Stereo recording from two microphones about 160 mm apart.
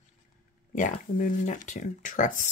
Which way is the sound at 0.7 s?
55° left (ahead or behind).